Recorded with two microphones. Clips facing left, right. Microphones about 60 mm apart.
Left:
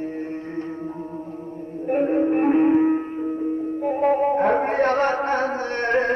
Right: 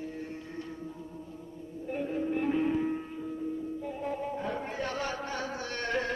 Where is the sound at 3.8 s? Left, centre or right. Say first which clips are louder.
Left 15 dB; left.